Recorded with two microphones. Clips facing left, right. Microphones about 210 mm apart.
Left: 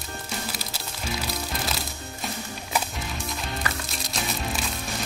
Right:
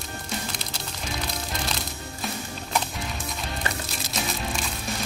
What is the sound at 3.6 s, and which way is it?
Music, 25° right (ahead or behind).